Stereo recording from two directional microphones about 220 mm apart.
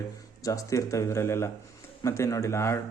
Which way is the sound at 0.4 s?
15° left (ahead or behind).